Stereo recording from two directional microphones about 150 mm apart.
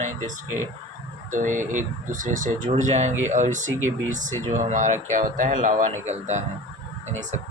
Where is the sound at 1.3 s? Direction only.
60° right (ahead or behind).